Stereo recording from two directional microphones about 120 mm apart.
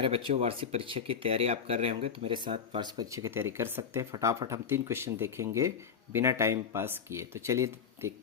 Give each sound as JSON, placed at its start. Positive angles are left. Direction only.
{"t": 0.0, "sound": "speech", "side_deg": -45}
{"t": 2.8, "sound": "speech", "side_deg": -30}